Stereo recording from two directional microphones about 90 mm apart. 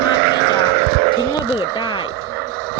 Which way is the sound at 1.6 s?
60° left (ahead or behind).